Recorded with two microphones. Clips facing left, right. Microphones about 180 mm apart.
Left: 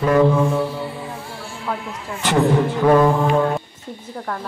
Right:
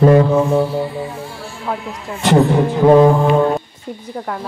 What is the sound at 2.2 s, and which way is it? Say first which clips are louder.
Music: right 4 dB; 25° right (ahead or behind).